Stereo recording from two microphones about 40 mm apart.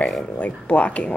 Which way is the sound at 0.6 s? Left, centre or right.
Left.